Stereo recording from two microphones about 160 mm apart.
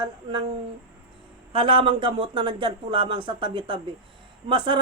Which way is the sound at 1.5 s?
35° right (ahead or behind).